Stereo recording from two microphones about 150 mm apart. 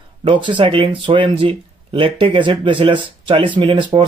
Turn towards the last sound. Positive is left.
turn(degrees=-35)  # may be behind; listen again after turning